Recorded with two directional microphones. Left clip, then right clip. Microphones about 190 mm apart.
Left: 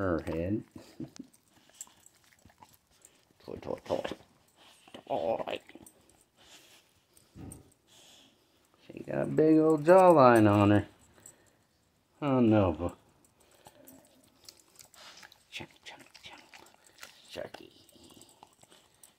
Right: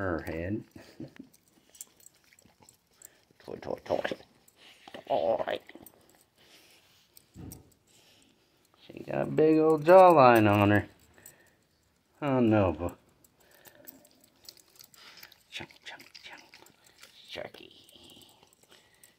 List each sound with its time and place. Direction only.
0.0 s speech: 30° left (ahead or behind)
3.0 s a sound: 15° left (ahead or behind)
5.1 s speech: 10° left (ahead or behind)
8.8 s speech: 5° left (ahead or behind)
12.2 s speech: 15° left (ahead or behind)
15.0 s dog: 35° left (ahead or behind)
15.5 s dog: 10° left (ahead or behind)
16.1 s a sound: 15° left (ahead or behind)